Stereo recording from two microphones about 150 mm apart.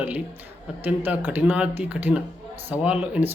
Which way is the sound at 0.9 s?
10° right (ahead or behind).